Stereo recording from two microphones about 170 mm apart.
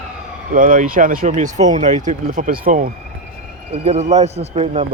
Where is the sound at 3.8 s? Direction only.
40° right (ahead or behind).